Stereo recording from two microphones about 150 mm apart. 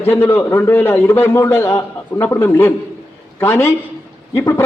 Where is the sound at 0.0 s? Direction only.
15° left (ahead or behind).